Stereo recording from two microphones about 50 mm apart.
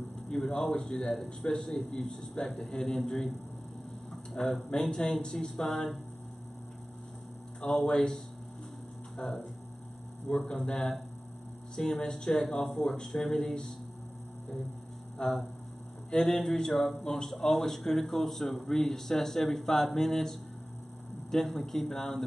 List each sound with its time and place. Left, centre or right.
0.3 s a man's voice: centre
4.1 s a sound: centre
4.6 s speech: centre
7.6 s speech: centre
15.2 s a man's voice: centre